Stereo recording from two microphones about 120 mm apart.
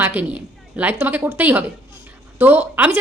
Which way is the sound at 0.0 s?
15° right (ahead or behind).